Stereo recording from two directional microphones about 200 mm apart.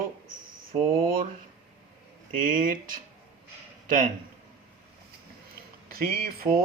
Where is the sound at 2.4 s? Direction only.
45° right (ahead or behind).